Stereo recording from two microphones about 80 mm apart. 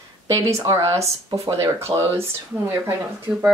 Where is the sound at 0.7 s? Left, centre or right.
Right.